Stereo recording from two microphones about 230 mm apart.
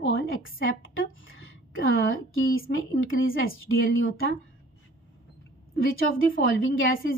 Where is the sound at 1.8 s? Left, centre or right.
Left.